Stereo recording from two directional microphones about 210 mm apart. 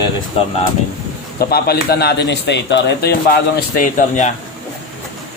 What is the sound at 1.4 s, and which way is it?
A man's voice, 50° left (ahead or behind).